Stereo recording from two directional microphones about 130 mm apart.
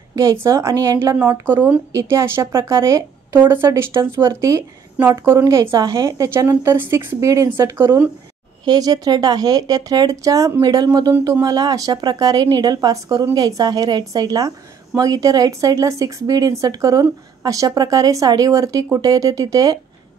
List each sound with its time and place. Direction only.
0.1 s speech: 25° right (ahead or behind)
8.6 s speech: 30° right (ahead or behind)